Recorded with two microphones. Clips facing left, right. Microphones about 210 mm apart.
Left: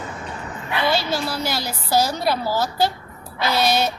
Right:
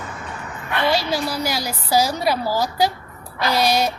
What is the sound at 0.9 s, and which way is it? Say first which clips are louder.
A woman's voice: right 1 dB; 10° right (ahead or behind).